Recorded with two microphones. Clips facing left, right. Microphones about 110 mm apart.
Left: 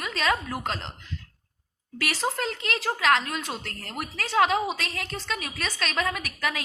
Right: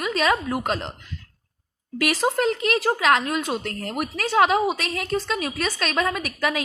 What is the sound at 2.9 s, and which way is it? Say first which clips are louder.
A woman's voice: right 3 dB; 20° right (ahead or behind).